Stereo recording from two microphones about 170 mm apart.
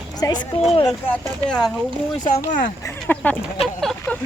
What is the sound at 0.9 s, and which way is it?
Speech, 10° left (ahead or behind).